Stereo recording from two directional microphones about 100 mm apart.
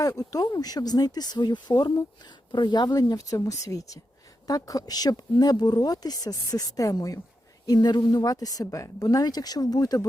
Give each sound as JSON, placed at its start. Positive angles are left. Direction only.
{"t": 0.0, "sound": "speech", "side_deg": 35}